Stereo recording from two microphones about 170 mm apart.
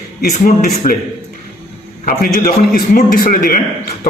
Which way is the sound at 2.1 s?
60° left (ahead or behind).